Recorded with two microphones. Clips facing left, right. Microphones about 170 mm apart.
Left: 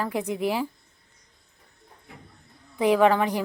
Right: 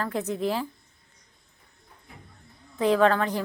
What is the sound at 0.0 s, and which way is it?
Speech, 10° left (ahead or behind).